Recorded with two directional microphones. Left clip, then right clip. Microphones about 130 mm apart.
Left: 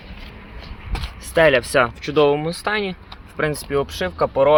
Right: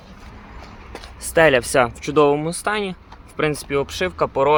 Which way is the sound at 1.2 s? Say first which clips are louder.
Even; 25° right (ahead or behind).